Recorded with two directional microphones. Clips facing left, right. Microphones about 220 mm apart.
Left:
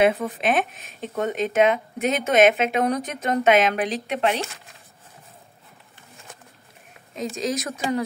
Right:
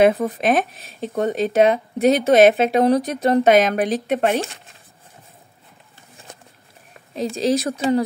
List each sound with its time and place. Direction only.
0.0 s speech: 40° right (ahead or behind)
7.2 s speech: 30° right (ahead or behind)